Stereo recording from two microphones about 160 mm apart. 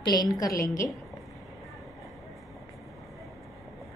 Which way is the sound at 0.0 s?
25° left (ahead or behind).